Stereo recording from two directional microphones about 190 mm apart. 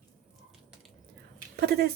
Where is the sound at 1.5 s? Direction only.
55° right (ahead or behind).